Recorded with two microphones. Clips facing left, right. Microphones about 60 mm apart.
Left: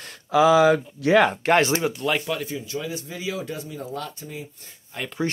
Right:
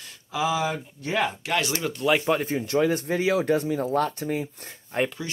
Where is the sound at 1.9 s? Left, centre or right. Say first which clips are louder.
Right 2 dB; centre.